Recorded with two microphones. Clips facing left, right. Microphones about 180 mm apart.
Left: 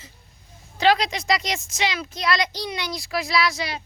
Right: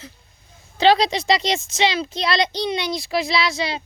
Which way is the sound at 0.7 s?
30° right (ahead or behind).